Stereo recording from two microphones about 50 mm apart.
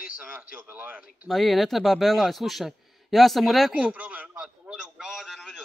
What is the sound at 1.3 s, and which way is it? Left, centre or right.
A man's voice, centre.